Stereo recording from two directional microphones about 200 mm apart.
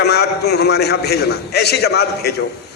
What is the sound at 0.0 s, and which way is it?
A man's voice, 55° left (ahead or behind).